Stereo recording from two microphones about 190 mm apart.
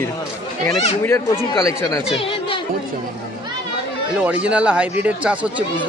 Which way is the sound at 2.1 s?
30° left (ahead or behind).